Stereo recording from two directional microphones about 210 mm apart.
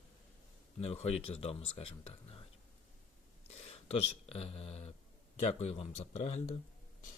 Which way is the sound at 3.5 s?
30° left (ahead or behind).